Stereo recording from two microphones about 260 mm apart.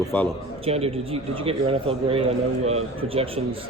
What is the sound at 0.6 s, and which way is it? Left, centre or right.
A man's voice, right.